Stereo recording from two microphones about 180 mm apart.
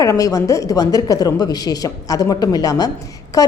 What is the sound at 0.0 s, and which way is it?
A woman's voice, 20° left (ahead or behind).